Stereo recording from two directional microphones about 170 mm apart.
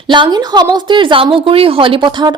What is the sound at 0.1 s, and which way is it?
A woman's voice, 25° right (ahead or behind).